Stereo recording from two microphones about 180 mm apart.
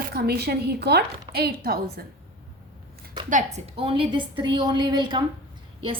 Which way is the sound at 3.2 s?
45° right (ahead or behind).